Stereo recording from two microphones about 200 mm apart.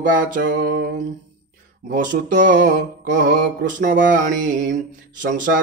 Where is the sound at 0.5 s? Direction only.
45° right (ahead or behind).